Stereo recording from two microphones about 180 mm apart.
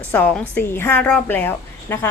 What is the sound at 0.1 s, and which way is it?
A woman's voice, 10° left (ahead or behind).